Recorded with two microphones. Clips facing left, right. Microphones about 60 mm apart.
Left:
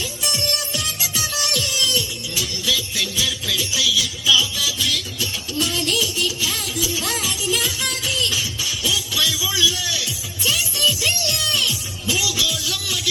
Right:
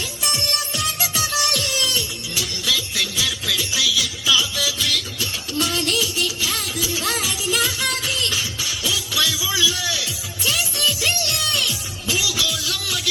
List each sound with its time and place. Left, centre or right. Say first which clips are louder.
0.8 s music: right 3 dB; right
9.4 s music: even; right